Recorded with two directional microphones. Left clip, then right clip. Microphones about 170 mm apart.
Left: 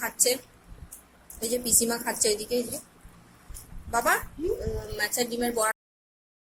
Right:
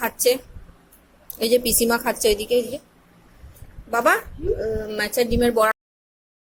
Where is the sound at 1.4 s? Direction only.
45° right (ahead or behind).